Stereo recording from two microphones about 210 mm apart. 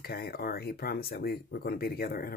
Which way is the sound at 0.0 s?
45° left (ahead or behind).